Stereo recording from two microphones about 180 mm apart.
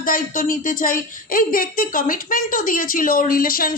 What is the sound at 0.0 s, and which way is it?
A woman's voice, 50° left (ahead or behind).